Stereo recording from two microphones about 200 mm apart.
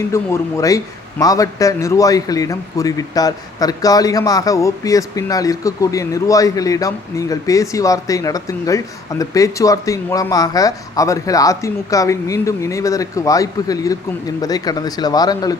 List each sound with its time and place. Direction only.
0.1 s a man's voice: 15° left (ahead or behind)